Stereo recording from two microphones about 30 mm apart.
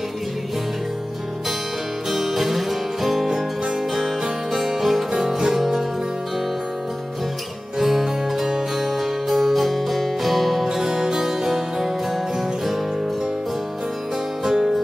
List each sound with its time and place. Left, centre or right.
2.0 s music: centre
7.8 s music: centre
11.4 s harpsichord: centre
14.4 s music: centre